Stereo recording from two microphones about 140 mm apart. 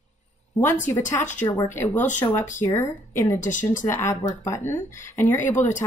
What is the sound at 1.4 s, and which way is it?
Speech, 20° left (ahead or behind).